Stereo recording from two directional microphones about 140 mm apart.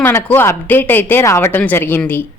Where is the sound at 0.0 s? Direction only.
15° left (ahead or behind).